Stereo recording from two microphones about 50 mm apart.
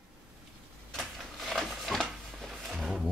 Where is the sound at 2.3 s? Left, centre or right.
Centre.